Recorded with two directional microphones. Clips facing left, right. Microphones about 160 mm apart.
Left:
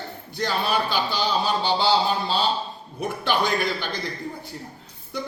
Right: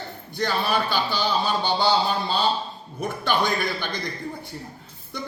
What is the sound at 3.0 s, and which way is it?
A woman's voice, 10° left (ahead or behind).